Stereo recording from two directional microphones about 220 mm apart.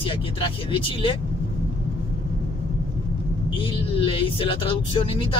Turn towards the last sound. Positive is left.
turn(degrees=20)  # may be behind; listen again after turning